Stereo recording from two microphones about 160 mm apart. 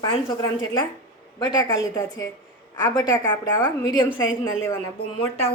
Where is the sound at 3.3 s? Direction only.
10° left (ahead or behind).